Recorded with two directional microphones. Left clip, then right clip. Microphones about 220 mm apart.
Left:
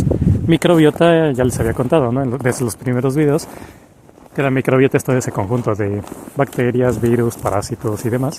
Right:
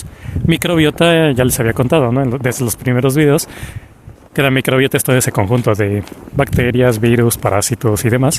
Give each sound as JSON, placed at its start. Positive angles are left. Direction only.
{"t": 0.0, "sound": "speech", "side_deg": -25}